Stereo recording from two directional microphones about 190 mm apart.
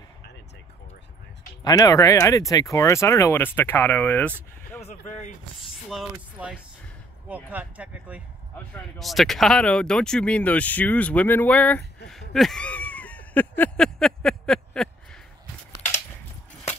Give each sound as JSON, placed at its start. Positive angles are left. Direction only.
{"t": 1.6, "sound": "speech", "side_deg": 20}
{"t": 5.9, "sound": "speech", "side_deg": 0}
{"t": 12.1, "sound": "a sound", "side_deg": 0}